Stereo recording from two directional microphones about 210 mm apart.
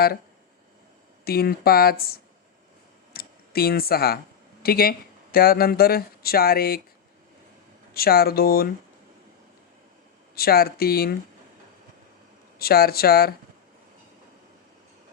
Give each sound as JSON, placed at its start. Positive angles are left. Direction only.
{"t": 1.2, "sound": "speech", "side_deg": 45}
{"t": 3.1, "sound": "a sound", "side_deg": 45}
{"t": 4.6, "sound": "speech", "side_deg": 45}
{"t": 7.9, "sound": "speech", "side_deg": 45}
{"t": 10.3, "sound": "speech", "side_deg": 45}
{"t": 12.5, "sound": "speech", "side_deg": 45}